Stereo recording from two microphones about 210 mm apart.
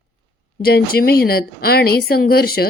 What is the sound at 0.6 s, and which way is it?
Speech, 45° left (ahead or behind).